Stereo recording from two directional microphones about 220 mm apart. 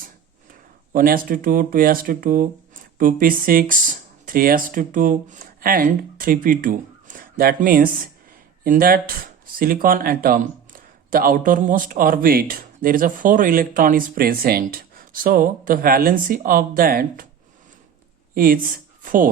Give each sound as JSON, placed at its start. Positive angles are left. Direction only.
{"t": 0.9, "sound": "speech", "side_deg": -40}
{"t": 18.3, "sound": "speech", "side_deg": -40}